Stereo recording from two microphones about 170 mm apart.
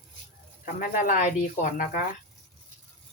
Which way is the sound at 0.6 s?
55° left (ahead or behind).